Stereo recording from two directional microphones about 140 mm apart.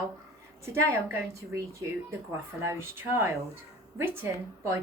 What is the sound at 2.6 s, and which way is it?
A woman's voice, 20° right (ahead or behind).